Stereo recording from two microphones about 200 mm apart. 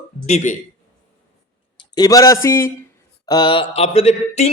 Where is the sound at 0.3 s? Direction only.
35° left (ahead or behind).